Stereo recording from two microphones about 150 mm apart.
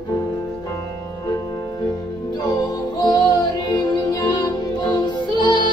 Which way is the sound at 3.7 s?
25° left (ahead or behind).